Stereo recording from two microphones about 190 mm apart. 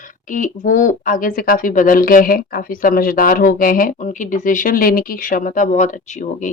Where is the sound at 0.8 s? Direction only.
45° left (ahead or behind).